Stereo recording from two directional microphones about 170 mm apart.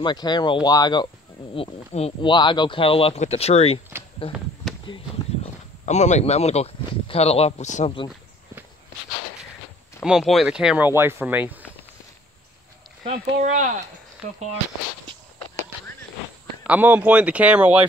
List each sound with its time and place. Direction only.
0.0 s speech: 25° left (ahead or behind)
1.5 s speech: 35° left (ahead or behind)
4.8 s a sound: 30° left (ahead or behind)
5.9 s speech: 40° left (ahead or behind)
10.0 s speech: centre (ahead or behind)
13.1 s speech: 45° right (ahead or behind)
16.6 s speech: 10° right (ahead or behind)